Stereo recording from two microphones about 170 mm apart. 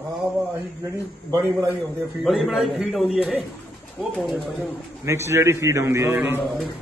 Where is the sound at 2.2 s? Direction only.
Centre (ahead or behind).